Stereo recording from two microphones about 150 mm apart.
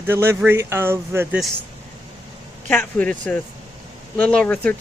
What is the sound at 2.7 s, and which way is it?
Speech, 10° left (ahead or behind).